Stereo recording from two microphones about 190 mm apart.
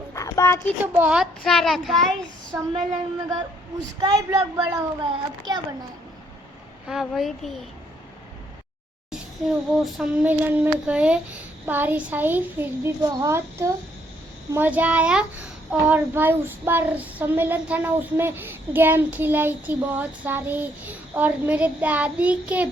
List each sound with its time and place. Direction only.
0.1 s a sound: 15° left (ahead or behind)
0.9 s a child's voice: 5° right (ahead or behind)
4.0 s a child's voice: 20° right (ahead or behind)
6.8 s a child's voice: centre (ahead or behind)
9.1 s child singing: 5° right (ahead or behind)